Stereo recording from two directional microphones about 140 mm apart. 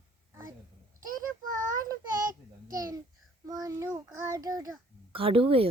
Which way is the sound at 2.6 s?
25° right (ahead or behind).